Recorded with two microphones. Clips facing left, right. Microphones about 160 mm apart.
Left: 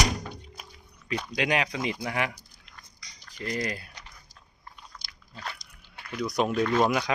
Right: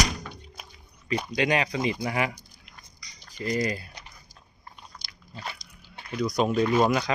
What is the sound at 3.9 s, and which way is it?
Biting, 15° right (ahead or behind).